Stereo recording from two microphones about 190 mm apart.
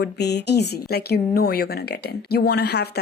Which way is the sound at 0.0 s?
60° left (ahead or behind).